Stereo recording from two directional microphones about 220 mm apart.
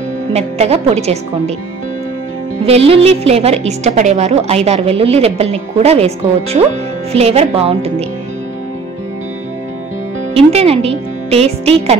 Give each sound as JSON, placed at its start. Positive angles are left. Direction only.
{"t": 0.3, "sound": "a woman's voice", "side_deg": -30}
{"t": 2.6, "sound": "a woman's voice", "side_deg": -25}
{"t": 10.3, "sound": "a woman's voice", "side_deg": -25}